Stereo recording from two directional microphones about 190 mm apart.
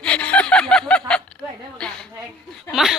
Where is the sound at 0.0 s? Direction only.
5° left (ahead or behind).